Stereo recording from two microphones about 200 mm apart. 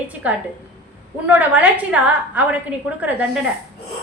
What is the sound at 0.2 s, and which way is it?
A woman's voice, 5° right (ahead or behind).